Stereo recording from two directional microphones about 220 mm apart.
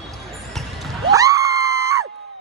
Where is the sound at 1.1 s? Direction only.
15° right (ahead or behind).